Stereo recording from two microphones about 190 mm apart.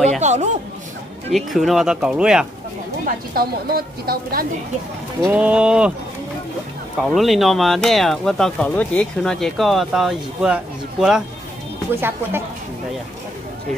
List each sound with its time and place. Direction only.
0.2 s a sound: 35° right (ahead or behind)
1.3 s speech: centre (ahead or behind)
3.1 s a woman's voice: 50° right (ahead or behind)
5.3 s speech: 5° right (ahead or behind)
7.0 s speech: centre (ahead or behind)